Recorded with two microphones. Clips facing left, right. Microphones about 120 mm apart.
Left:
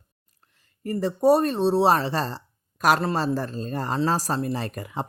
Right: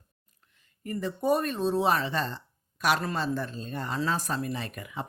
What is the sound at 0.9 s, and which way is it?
Speech, 35° left (ahead or behind).